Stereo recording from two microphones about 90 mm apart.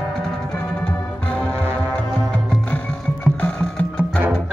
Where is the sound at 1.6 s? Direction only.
30° right (ahead or behind).